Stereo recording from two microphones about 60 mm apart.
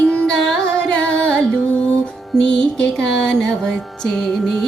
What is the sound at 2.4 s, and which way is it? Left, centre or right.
Music, centre.